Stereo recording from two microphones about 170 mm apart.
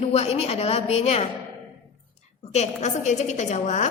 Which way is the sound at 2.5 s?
45° left (ahead or behind).